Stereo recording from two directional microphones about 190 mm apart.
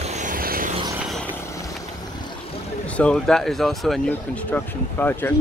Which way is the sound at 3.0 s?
5° left (ahead or behind).